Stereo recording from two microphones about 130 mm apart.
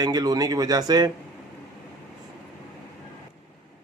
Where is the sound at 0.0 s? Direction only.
30° right (ahead or behind).